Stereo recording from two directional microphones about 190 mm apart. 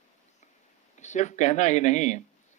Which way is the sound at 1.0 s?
40° left (ahead or behind).